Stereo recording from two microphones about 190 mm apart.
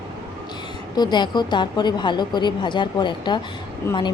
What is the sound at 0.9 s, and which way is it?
Speech, 20° left (ahead or behind).